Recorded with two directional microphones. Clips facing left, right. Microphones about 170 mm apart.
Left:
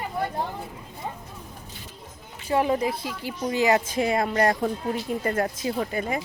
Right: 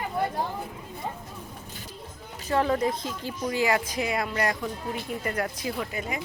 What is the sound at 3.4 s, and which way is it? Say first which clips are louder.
A woman's voice: left 4 dB; 25° left (ahead or behind).